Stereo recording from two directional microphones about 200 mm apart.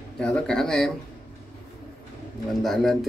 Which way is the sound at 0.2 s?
5° left (ahead or behind).